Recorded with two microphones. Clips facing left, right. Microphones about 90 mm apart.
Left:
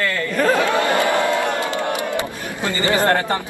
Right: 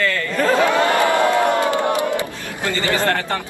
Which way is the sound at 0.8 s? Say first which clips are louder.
Right 2 dB; 20° left (ahead or behind).